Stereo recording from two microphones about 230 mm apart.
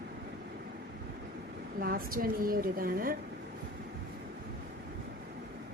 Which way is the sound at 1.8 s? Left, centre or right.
Right.